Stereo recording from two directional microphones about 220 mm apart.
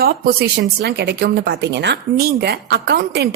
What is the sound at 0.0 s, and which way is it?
Speech, 45° right (ahead or behind).